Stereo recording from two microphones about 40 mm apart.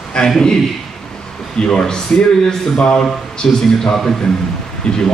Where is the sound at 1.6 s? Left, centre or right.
Centre.